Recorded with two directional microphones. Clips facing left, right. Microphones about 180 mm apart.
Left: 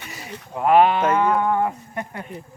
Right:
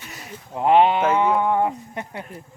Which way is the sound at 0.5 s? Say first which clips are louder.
Even; 25° right (ahead or behind).